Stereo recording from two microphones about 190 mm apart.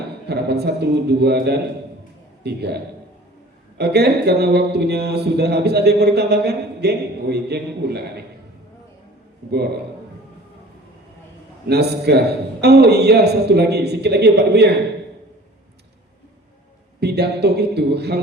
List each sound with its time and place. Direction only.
0.3 s a man's voice: 60° right (ahead or behind)
11.7 s speech: 60° right (ahead or behind)
17.0 s speech: 60° right (ahead or behind)